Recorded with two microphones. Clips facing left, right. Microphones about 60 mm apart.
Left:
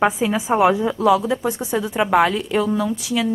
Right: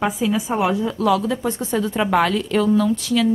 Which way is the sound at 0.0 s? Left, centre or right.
Left.